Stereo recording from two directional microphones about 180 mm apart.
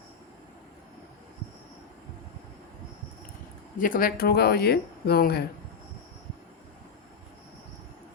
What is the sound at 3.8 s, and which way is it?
Speech, 50° left (ahead or behind).